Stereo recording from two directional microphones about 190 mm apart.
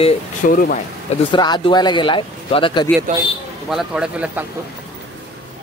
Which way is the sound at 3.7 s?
5° right (ahead or behind).